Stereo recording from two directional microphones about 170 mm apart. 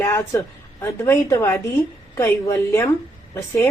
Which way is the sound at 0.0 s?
15° left (ahead or behind).